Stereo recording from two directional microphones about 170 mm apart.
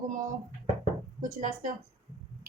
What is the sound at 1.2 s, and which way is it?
Speech, 50° right (ahead or behind).